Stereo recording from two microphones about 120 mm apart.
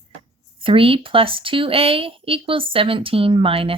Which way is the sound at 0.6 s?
50° right (ahead or behind).